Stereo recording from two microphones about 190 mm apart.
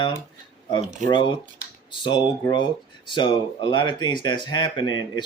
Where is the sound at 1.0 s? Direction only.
25° left (ahead or behind).